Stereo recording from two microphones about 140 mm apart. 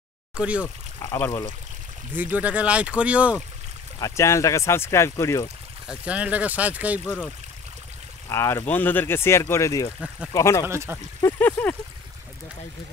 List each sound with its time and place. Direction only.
0.4 s speech: 10° right (ahead or behind)
0.9 s speech: 20° left (ahead or behind)
2.1 s speech: 10° right (ahead or behind)
4.0 s speech: 20° left (ahead or behind)
5.9 s speech: 10° right (ahead or behind)
8.3 s speech: 20° left (ahead or behind)
9.9 s speech: 5° right (ahead or behind)
10.3 s speech: 20° left (ahead or behind)
10.7 s speech: 20° right (ahead or behind)
11.1 s speech: 20° left (ahead or behind)